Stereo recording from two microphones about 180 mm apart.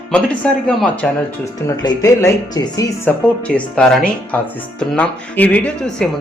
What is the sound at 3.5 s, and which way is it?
Speech, 5° left (ahead or behind).